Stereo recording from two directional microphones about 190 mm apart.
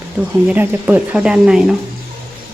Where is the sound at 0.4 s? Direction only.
10° right (ahead or behind).